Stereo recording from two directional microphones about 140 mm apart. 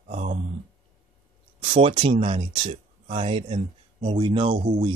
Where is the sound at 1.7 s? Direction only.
45° right (ahead or behind).